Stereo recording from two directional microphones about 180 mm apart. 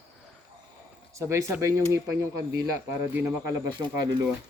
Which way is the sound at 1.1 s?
15° right (ahead or behind).